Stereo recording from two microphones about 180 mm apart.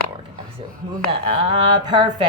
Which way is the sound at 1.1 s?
30° right (ahead or behind).